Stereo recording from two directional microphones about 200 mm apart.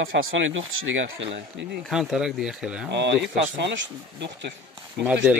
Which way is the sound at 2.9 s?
60° right (ahead or behind).